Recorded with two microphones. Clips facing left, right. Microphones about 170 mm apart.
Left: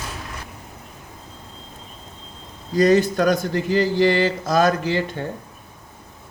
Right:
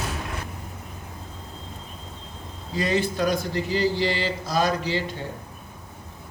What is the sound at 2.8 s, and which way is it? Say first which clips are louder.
Speech: left 8 dB; 45° left (ahead or behind).